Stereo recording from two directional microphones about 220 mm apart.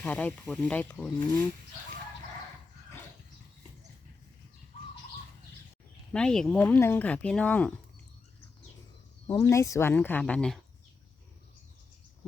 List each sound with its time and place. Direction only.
0.0 s speech: 5° left (ahead or behind)
6.1 s speech: 5° left (ahead or behind)
9.2 s speech: 15° left (ahead or behind)